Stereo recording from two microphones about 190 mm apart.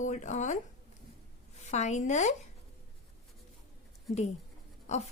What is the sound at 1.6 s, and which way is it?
Speech, 35° left (ahead or behind).